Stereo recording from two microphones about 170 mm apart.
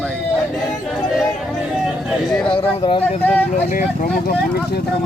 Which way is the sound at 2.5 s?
30° left (ahead or behind).